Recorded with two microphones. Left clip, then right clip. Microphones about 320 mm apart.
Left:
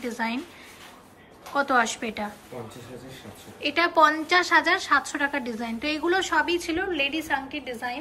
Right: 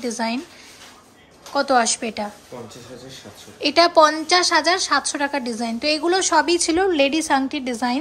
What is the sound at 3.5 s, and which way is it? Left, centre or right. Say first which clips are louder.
A woman's voice: right 7 dB; centre.